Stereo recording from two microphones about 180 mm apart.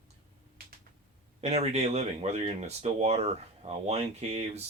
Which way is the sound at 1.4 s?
35° right (ahead or behind).